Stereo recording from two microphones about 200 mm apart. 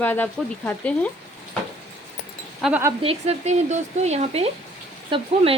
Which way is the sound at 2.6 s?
10° right (ahead or behind).